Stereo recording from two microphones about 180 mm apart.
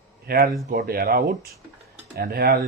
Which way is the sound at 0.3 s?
55° right (ahead or behind).